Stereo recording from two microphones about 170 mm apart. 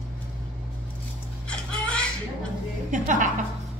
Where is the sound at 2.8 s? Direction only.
50° right (ahead or behind).